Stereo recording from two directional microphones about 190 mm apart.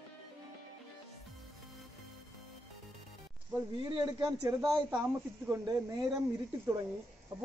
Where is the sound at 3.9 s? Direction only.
25° right (ahead or behind).